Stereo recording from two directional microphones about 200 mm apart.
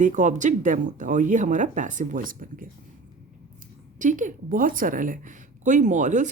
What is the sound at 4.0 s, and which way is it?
Speech, 40° right (ahead or behind).